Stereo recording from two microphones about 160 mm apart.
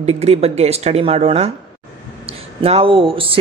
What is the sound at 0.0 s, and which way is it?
Speech, 40° right (ahead or behind).